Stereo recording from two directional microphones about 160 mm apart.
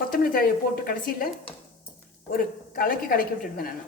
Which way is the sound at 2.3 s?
65° left (ahead or behind).